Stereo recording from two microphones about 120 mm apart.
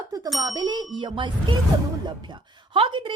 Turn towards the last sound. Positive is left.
turn(degrees=-45)  # may be behind; listen again after turning